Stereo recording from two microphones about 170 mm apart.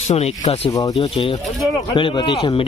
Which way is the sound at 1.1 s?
35° left (ahead or behind).